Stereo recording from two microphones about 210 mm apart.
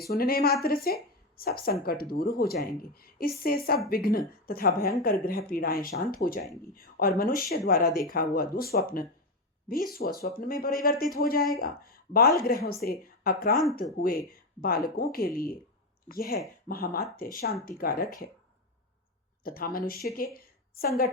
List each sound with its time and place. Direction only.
0.0 s speech: 45° left (ahead or behind)
14.6 s speech: 45° left (ahead or behind)
19.5 s speech: 45° left (ahead or behind)
20.3 s a sound: 45° left (ahead or behind)